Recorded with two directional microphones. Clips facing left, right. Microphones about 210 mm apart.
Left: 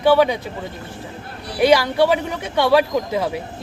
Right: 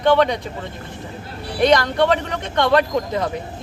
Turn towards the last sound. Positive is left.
turn(degrees=5)  # may be behind; listen again after turning